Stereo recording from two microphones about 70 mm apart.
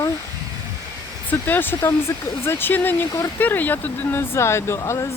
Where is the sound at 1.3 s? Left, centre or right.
Left.